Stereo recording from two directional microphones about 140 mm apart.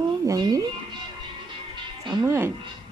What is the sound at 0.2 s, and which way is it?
Speech, 25° right (ahead or behind).